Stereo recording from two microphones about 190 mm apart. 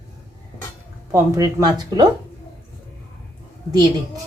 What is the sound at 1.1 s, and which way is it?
Speech, 15° right (ahead or behind).